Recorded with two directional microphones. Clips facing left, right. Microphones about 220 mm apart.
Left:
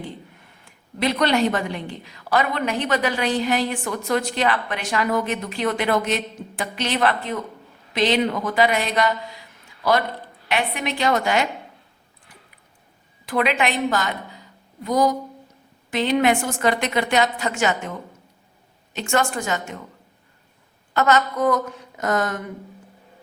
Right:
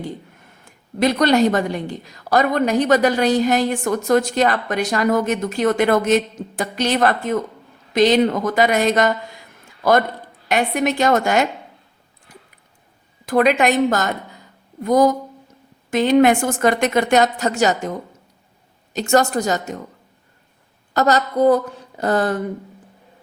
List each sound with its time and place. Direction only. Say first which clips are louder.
0.6 s a woman's voice: right 5 dB; 45° right (ahead or behind)
12.3 s squish: right 6 dB; 40° right (ahead or behind)
13.2 s a woman's voice: right 6 dB; 45° right (ahead or behind)
20.9 s speech: right 2 dB; 35° right (ahead or behind)